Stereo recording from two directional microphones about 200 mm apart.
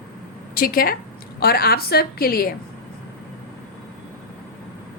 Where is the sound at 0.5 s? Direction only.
45° left (ahead or behind).